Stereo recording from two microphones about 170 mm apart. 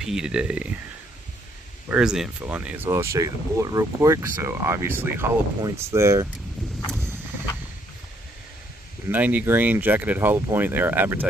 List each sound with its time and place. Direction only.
0.0 s speech: 5° right (ahead or behind)
1.9 s speech: 5° right (ahead or behind)
9.1 s speech: 10° right (ahead or behind)